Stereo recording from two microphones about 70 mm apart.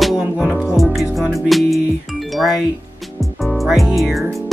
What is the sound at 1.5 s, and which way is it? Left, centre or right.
Music, centre.